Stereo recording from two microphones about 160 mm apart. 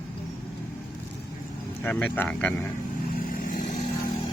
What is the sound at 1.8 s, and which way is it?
Speech, 10° left (ahead or behind).